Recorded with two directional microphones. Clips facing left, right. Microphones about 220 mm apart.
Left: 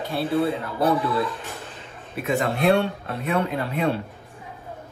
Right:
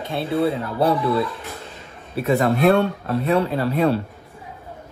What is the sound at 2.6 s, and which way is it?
A man's voice, 45° right (ahead or behind).